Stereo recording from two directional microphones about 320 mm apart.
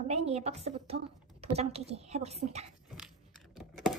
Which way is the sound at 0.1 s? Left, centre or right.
Centre.